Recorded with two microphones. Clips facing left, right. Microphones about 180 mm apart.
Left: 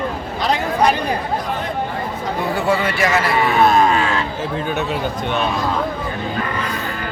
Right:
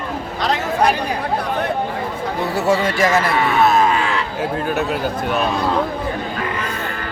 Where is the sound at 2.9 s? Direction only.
40° right (ahead or behind).